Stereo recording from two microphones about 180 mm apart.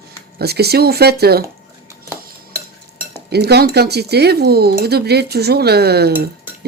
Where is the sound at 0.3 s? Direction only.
65° right (ahead or behind).